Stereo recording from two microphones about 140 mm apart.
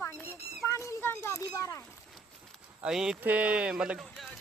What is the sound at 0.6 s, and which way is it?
Speech, 20° left (ahead or behind).